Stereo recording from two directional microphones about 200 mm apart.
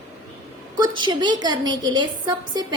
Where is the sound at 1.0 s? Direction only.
20° right (ahead or behind).